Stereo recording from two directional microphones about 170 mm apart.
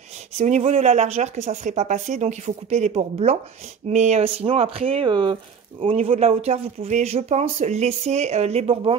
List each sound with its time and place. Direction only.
0.4 s speech: 45° right (ahead or behind)